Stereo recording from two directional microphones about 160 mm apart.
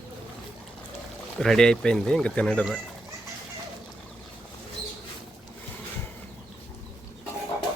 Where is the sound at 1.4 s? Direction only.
5° left (ahead or behind).